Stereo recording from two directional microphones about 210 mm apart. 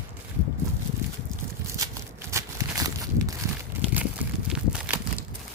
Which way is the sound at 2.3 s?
15° right (ahead or behind).